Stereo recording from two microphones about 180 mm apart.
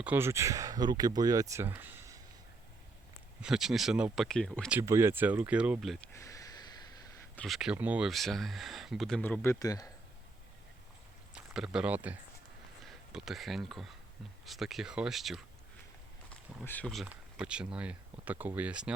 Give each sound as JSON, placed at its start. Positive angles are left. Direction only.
{"t": 0.0, "sound": "speech", "side_deg": -10}
{"t": 3.4, "sound": "speech", "side_deg": 0}
{"t": 4.7, "sound": "speech", "side_deg": -15}
{"t": 6.1, "sound": "a sound", "side_deg": 20}
{"t": 7.3, "sound": "speech", "side_deg": 0}
{"t": 11.3, "sound": "speech", "side_deg": -5}
{"t": 16.3, "sound": "a sound", "side_deg": 0}
{"t": 16.6, "sound": "speech", "side_deg": 5}